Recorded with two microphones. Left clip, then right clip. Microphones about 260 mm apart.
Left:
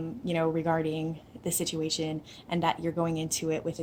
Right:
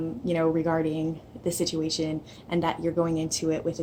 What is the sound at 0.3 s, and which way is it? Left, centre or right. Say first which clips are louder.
A woman's voice: right 3 dB; left.